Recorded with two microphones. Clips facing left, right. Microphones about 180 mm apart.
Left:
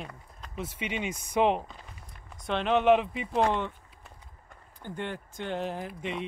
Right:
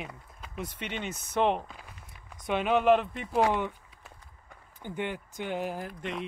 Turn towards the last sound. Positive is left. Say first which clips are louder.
# left 1 dB
turn(degrees=0)  # may be behind; listen again after turning